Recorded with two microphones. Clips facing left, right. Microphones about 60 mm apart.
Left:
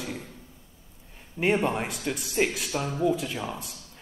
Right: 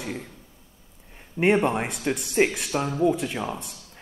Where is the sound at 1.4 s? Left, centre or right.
Centre.